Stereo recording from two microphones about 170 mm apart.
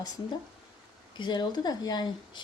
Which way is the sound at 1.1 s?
25° left (ahead or behind).